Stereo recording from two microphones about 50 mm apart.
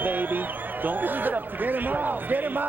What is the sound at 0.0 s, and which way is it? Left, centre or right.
A man's voice, right.